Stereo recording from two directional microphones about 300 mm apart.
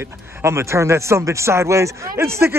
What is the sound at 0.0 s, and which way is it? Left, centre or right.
Speech, centre.